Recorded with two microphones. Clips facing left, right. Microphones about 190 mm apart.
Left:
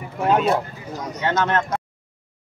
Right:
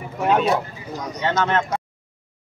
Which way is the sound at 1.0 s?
5° left (ahead or behind).